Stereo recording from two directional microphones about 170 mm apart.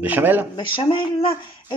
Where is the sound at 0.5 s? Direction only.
30° left (ahead or behind).